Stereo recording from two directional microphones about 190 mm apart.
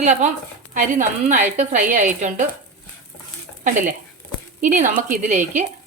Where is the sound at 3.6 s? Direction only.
45° right (ahead or behind).